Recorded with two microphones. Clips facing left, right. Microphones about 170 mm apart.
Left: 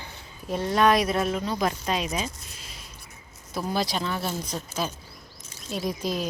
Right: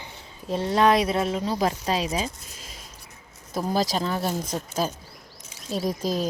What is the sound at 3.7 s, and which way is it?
Speech, 40° right (ahead or behind).